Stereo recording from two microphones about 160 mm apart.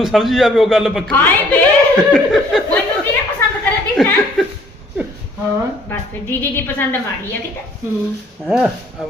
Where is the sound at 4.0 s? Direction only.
5° left (ahead or behind).